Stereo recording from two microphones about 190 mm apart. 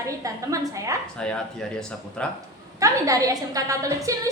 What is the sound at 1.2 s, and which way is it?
Speech, 5° left (ahead or behind).